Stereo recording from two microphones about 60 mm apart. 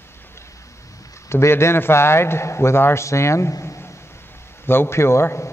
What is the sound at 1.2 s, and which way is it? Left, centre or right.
A man's voice, left.